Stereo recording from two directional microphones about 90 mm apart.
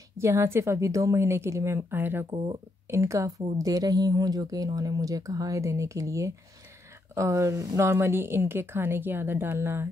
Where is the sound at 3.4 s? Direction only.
45° right (ahead or behind).